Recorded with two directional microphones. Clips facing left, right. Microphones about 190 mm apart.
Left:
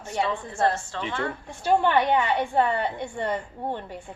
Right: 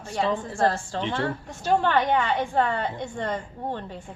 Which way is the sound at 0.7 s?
35° right (ahead or behind).